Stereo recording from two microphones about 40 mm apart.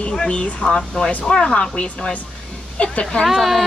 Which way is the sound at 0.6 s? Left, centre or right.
Centre.